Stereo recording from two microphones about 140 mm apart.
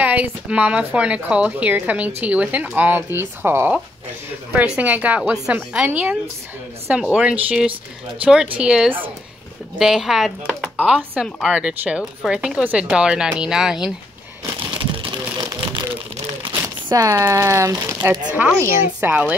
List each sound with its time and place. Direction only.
0.0 s a woman's voice: 10° right (ahead or behind)
11.2 s speech: 5° left (ahead or behind)
11.5 s speech: 10° right (ahead or behind)
14.7 s a sound: 35° right (ahead or behind)
16.6 s a woman's voice: 25° right (ahead or behind)